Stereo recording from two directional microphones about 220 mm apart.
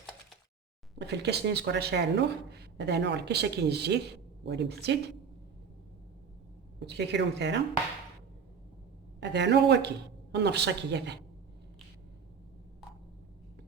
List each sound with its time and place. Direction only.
0.9 s speech: 50° right (ahead or behind)
6.7 s speech: 50° right (ahead or behind)
9.2 s speech: 50° right (ahead or behind)